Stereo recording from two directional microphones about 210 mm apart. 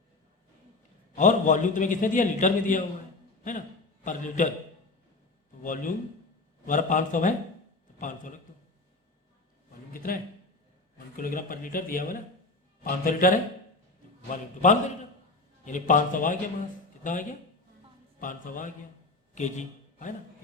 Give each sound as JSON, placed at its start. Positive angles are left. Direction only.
{"t": 1.1, "sound": "a man's voice", "side_deg": 35}
{"t": 4.0, "sound": "a man's voice", "side_deg": 35}
{"t": 5.6, "sound": "a man's voice", "side_deg": 40}
{"t": 9.9, "sound": "speech", "side_deg": 40}
{"t": 11.2, "sound": "a man's voice", "side_deg": 40}